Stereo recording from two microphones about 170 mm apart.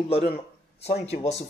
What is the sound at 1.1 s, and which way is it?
Speech, 40° left (ahead or behind).